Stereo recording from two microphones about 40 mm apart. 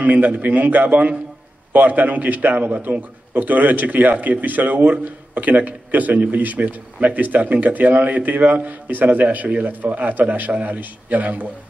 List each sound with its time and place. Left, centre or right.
0.0 s a man's voice: right